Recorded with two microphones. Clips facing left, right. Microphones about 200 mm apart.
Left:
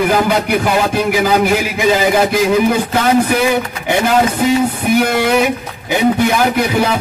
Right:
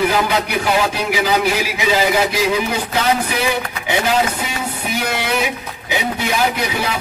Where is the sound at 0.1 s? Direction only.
50° left (ahead or behind).